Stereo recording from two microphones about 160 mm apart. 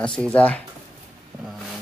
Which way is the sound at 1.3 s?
25° right (ahead or behind).